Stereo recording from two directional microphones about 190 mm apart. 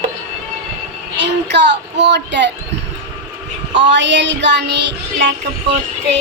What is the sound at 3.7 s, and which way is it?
Child singing, 70° right (ahead or behind).